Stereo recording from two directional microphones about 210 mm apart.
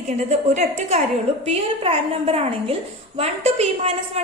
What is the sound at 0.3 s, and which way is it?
A woman's voice, 35° right (ahead or behind).